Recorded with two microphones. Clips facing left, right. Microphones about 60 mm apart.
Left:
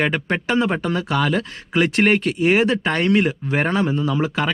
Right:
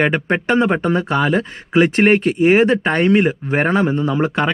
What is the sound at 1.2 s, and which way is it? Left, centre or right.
Speech, right.